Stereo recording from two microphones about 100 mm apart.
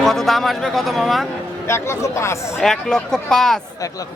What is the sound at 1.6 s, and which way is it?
Speech, 25° left (ahead or behind).